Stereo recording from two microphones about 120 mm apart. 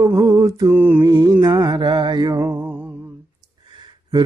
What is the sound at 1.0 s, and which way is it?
Mantra, 35° right (ahead or behind).